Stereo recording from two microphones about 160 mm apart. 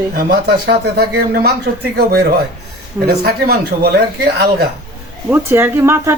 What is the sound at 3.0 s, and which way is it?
Speech, 75° right (ahead or behind).